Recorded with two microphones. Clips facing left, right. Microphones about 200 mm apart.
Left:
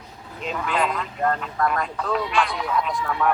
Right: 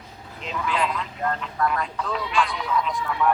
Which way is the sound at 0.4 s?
50° left (ahead or behind).